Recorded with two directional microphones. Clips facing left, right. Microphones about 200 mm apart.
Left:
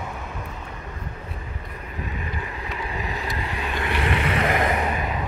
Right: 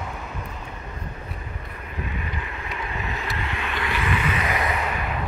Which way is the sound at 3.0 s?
35° left (ahead or behind).